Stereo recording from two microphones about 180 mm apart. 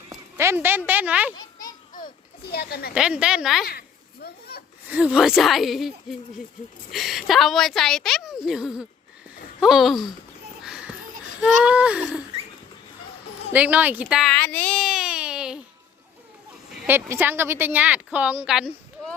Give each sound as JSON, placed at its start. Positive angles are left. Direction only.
{"t": 0.1, "sound": "a sound", "side_deg": -15}
{"t": 0.9, "sound": "speech", "side_deg": -10}
{"t": 1.4, "sound": "children playing", "side_deg": 20}
{"t": 1.9, "sound": "a sound", "side_deg": 50}
{"t": 2.9, "sound": "a woman's voice", "side_deg": -5}
{"t": 3.7, "sound": "children playing", "side_deg": 60}
{"t": 4.9, "sound": "a woman's voice", "side_deg": -5}
{"t": 10.6, "sound": "a sound", "side_deg": -5}
{"t": 11.3, "sound": "speech", "side_deg": -5}
{"t": 13.5, "sound": "speech", "side_deg": -10}
{"t": 14.3, "sound": "a child's voice", "side_deg": 10}
{"t": 16.8, "sound": "speech", "side_deg": -10}